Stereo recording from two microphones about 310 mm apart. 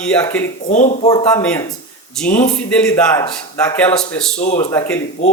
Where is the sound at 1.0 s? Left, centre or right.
Centre.